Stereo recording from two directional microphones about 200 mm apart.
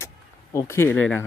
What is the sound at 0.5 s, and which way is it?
Speech, 15° left (ahead or behind).